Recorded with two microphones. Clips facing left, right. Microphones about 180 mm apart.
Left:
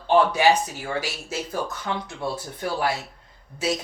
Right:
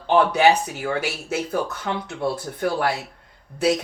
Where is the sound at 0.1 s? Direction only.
60° right (ahead or behind).